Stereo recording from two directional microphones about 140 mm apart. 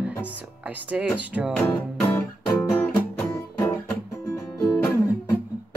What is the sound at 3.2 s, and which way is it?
Music, 15° left (ahead or behind).